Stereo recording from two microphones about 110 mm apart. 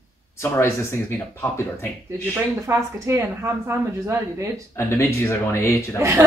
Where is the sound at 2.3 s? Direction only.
25° right (ahead or behind).